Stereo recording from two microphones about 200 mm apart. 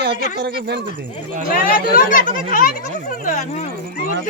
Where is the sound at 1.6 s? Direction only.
45° left (ahead or behind).